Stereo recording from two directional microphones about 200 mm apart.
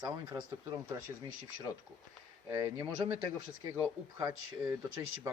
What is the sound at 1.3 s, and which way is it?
Speech, 80° right.